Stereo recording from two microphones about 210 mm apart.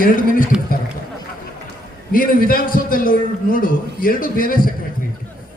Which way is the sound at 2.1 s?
40° left (ahead or behind).